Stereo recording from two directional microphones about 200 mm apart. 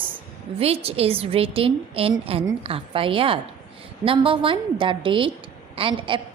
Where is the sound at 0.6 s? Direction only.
30° right (ahead or behind).